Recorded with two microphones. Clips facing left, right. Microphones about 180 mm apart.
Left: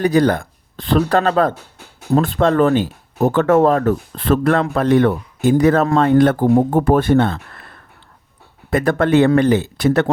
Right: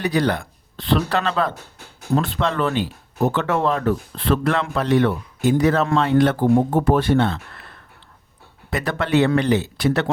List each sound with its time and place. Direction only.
0.0 s speech: 45° left (ahead or behind)
8.7 s speech: 50° left (ahead or behind)